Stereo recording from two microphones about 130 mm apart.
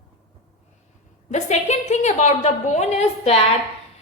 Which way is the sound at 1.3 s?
60° left (ahead or behind).